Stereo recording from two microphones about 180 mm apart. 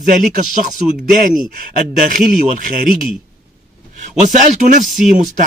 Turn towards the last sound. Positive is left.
turn(degrees=-45)  # may be behind; listen again after turning